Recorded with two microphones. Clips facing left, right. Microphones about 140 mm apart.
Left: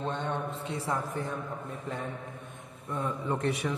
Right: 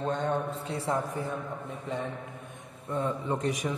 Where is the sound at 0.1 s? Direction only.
40° right (ahead or behind).